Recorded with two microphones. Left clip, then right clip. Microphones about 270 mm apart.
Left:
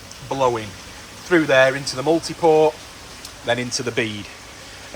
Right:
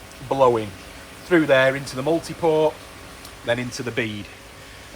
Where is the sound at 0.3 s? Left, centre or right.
Centre.